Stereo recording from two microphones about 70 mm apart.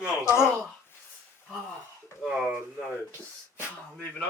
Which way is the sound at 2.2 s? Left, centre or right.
Centre.